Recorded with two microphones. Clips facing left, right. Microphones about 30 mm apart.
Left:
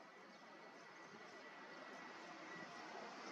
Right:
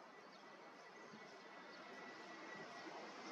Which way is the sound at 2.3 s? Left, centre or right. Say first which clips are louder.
Even; centre.